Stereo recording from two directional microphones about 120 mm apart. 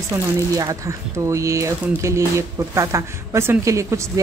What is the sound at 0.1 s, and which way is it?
Speech, 20° right (ahead or behind).